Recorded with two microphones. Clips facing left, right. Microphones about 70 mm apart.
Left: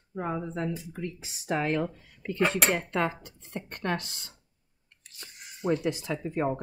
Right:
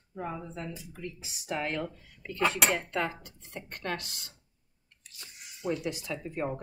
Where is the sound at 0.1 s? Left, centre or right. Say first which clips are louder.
Left 5 dB; left.